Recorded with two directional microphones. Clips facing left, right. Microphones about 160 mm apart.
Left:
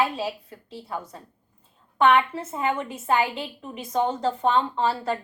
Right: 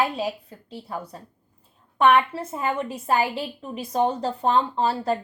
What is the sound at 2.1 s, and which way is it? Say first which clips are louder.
A woman's voice: right 1 dB; 35° right (ahead or behind).